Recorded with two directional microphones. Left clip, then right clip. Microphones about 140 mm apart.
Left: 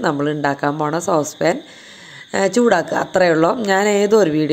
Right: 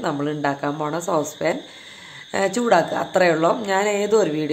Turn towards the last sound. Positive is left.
turn(degrees=35)  # may be behind; listen again after turning